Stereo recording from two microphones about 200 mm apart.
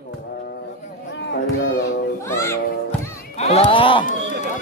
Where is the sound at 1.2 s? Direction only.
65° left (ahead or behind).